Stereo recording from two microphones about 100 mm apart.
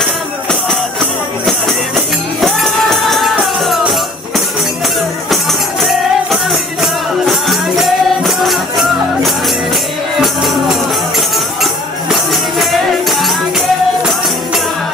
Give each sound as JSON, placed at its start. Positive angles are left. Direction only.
{"t": 0.0, "sound": "music", "side_deg": 5}
{"t": 2.4, "sound": "music", "side_deg": 0}
{"t": 5.3, "sound": "music", "side_deg": 0}
{"t": 11.1, "sound": "music", "side_deg": 0}